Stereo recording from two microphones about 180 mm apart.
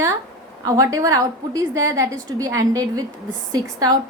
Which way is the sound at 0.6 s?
20° right (ahead or behind).